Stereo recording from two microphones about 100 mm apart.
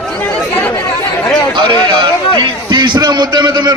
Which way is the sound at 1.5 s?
50° right (ahead or behind).